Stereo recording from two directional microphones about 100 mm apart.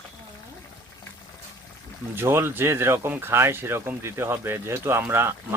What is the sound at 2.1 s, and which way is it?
Speech, 25° right (ahead or behind).